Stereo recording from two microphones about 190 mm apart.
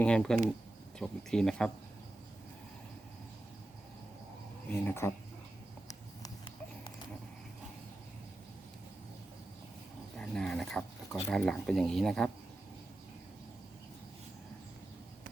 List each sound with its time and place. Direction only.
0.0 s speech: 5° left (ahead or behind)
4.9 s speech: 15° left (ahead or behind)
5.9 s a sound: 20° left (ahead or behind)
10.2 s speech: 5° left (ahead or behind)